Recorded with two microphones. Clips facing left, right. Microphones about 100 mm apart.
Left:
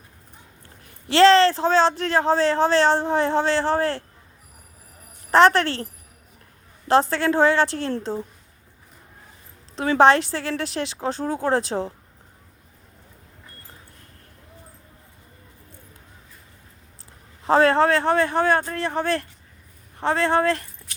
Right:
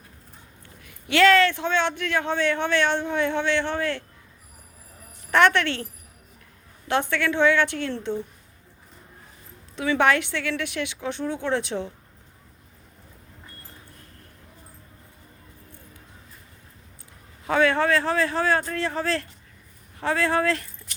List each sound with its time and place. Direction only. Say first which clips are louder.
0.8 s speech: left 4 dB; 35° left (ahead or behind)
7.1 s speech: left 2 dB; 35° left (ahead or behind)
9.7 s a woman's voice: left 2 dB; 45° left (ahead or behind)
10.0 s speech: left 7 dB; 30° left (ahead or behind)
17.4 s a man's voice: left 4 dB; 35° left (ahead or behind)